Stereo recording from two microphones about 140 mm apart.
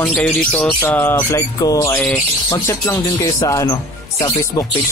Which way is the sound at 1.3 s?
25° left (ahead or behind).